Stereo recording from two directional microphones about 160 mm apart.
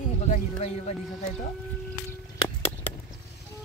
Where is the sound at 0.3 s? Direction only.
40° left (ahead or behind).